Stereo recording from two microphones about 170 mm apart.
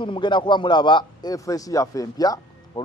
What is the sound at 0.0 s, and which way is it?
A man's voice, 30° left (ahead or behind).